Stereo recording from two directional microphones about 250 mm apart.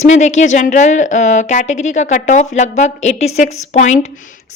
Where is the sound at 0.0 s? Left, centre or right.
Left.